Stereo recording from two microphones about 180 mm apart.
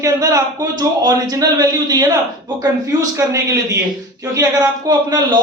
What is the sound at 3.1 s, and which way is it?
A man's voice, 15° right (ahead or behind).